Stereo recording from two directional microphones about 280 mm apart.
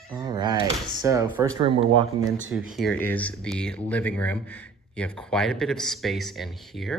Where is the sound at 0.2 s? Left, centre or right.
Centre.